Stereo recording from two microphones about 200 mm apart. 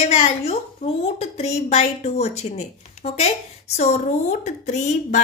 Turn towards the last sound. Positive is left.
turn(degrees=35)  # may be behind; listen again after turning